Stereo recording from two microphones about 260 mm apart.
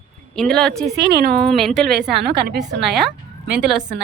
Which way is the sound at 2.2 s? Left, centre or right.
Right.